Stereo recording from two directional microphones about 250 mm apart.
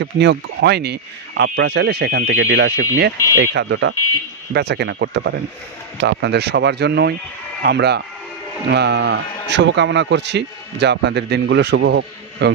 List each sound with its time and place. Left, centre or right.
0.0 s a man's voice: right